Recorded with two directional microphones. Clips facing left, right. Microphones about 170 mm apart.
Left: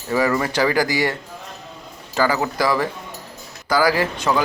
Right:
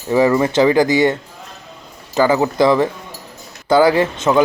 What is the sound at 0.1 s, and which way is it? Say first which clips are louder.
A man's voice: right 6 dB; 20° right (ahead or behind).